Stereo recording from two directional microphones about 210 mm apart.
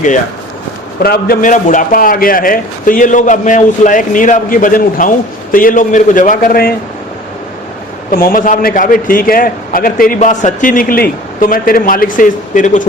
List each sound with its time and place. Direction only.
1.0 s a man's voice: 45° left (ahead or behind)
8.1 s a man's voice: 40° left (ahead or behind)